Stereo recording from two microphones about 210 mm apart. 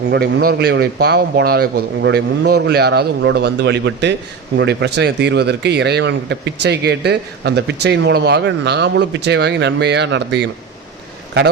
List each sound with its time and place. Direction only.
0.1 s a man's voice: 50° right (ahead or behind)